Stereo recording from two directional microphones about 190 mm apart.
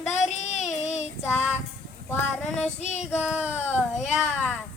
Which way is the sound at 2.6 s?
35° left (ahead or behind).